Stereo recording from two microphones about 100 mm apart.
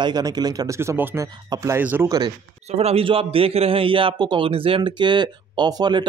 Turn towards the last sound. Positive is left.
turn(degrees=-45)  # may be behind; listen again after turning